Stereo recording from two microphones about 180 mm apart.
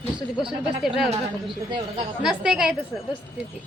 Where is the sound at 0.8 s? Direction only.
Centre (ahead or behind).